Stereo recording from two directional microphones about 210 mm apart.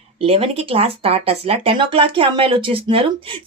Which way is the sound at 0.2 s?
25° right (ahead or behind).